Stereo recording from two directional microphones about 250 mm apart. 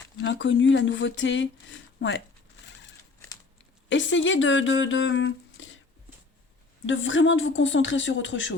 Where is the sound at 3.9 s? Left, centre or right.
Left.